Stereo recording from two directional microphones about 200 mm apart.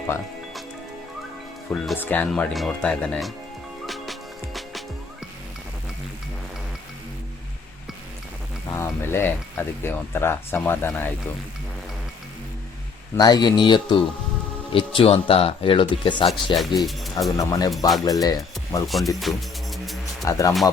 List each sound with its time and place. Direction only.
1.7 s speech: 5° left (ahead or behind)
3.8 s music: centre (ahead or behind)
8.7 s speech: 10° left (ahead or behind)
13.1 s speech: 20° left (ahead or behind)
16.6 s speech: centre (ahead or behind)
17.3 s speech: 15° left (ahead or behind)
18.9 s music: centre (ahead or behind)
20.2 s speech: 15° left (ahead or behind)